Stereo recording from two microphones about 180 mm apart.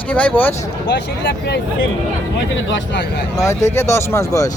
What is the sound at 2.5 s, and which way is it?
Speech, 85° left.